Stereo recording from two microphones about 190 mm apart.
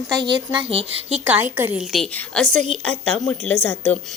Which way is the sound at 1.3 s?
5° right (ahead or behind).